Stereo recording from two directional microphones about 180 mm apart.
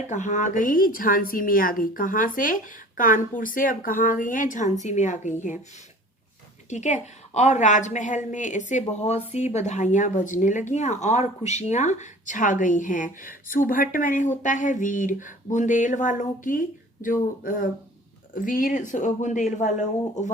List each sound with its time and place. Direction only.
0.1 s speech: 40° left (ahead or behind)
6.7 s a woman's voice: 40° left (ahead or behind)